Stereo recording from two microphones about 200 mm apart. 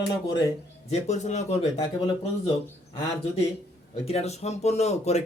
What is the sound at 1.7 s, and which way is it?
Speech, 25° left (ahead or behind).